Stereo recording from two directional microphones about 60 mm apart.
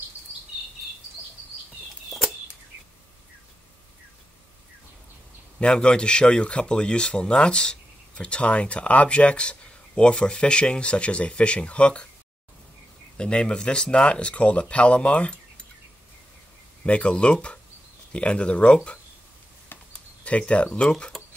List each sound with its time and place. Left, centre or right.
5.6 s speech: centre
13.2 s speech: centre
16.8 s speech: centre
20.2 s speech: left
20.8 s speech: centre